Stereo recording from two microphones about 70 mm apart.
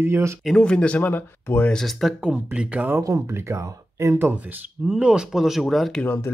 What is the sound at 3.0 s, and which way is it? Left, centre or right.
Speech, right.